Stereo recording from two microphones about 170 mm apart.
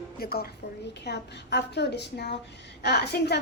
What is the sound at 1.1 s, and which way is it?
A woman's voice, 85° left.